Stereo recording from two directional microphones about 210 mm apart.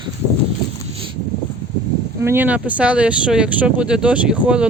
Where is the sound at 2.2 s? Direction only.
10° right (ahead or behind).